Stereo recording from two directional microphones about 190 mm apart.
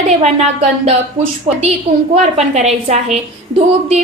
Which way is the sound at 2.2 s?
35° right (ahead or behind).